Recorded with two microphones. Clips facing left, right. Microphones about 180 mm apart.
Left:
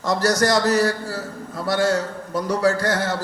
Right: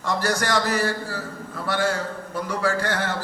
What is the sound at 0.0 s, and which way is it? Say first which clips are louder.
A man's voice: left 5 dB; 40° left (ahead or behind).